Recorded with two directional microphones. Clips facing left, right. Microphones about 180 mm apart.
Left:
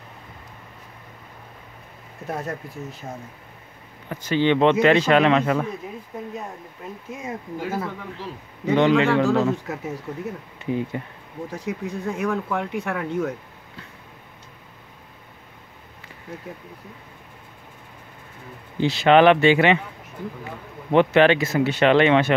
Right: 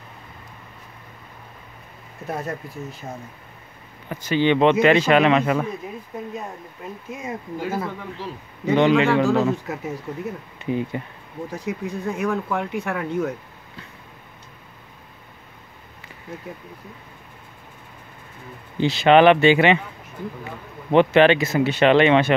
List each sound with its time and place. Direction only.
2.2 s speech: 5° right (ahead or behind)
4.1 s speech: 10° right (ahead or behind)
8.7 s speech: 15° right (ahead or behind)
18.8 s speech: 20° right (ahead or behind)
20.9 s speech: 25° right (ahead or behind)